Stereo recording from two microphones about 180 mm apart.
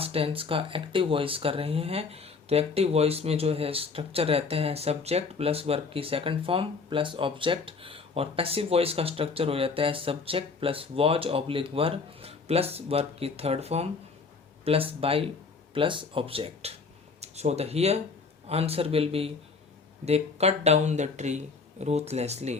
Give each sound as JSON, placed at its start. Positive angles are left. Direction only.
{"t": 0.0, "sound": "speech", "side_deg": -30}